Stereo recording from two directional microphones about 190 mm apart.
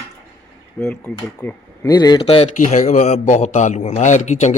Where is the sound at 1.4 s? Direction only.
15° left (ahead or behind).